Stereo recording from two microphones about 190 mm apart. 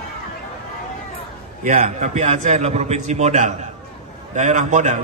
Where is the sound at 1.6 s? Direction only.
40° right (ahead or behind).